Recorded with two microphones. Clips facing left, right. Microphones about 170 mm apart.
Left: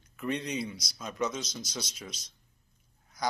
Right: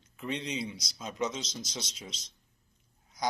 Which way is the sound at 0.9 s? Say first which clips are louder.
Left 1 dB; 20° right (ahead or behind).